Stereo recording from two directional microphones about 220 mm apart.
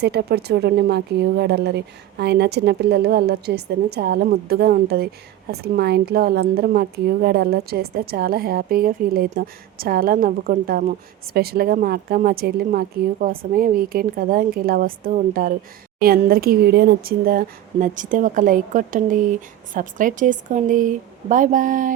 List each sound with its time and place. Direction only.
0.0 s a woman's voice: 45° right (ahead or behind)